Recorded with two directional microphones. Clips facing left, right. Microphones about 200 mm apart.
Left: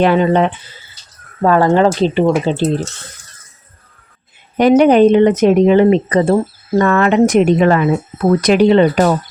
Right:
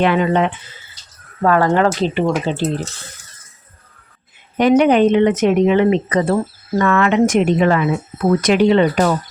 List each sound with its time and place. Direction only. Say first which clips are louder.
0.0 s speech: left 3 dB; 35° left (ahead or behind)
4.8 s speech: left 5 dB; 35° left (ahead or behind)